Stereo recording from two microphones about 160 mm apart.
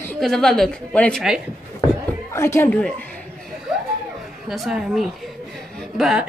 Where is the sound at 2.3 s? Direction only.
15° left (ahead or behind).